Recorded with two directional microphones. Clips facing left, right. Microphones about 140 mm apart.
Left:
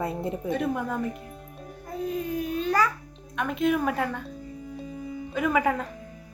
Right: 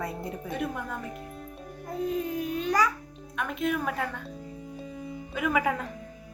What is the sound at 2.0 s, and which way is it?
Speech, 20° right (ahead or behind).